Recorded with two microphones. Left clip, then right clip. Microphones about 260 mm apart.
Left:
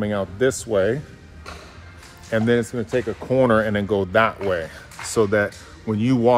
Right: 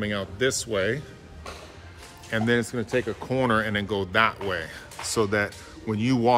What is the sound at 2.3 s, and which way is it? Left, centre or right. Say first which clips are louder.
Speech: left 4 dB; centre.